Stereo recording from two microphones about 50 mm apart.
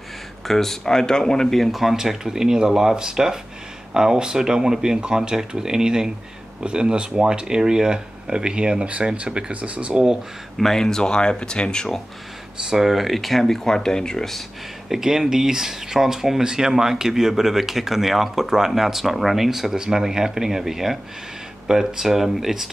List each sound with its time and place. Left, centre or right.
0.5 s speech: centre; by 10.0 s right
10.6 s speech: centre
12.6 s speech: centre
14.9 s speech: centre